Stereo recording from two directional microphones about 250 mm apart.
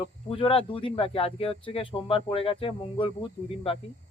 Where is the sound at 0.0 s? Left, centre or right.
Left.